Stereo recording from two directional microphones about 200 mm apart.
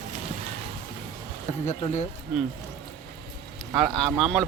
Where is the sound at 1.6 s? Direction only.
35° left (ahead or behind).